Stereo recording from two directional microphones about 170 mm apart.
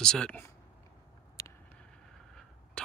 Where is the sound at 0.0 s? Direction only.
5° left (ahead or behind).